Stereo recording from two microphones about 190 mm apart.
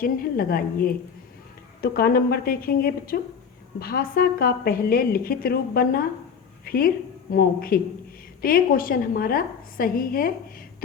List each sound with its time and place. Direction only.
0.0 s a woman's voice: 50° left (ahead or behind)